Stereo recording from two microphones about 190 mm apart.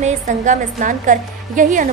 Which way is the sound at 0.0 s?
40° right (ahead or behind).